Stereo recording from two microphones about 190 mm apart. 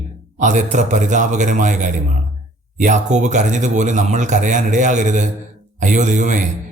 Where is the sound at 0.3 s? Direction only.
40° right (ahead or behind).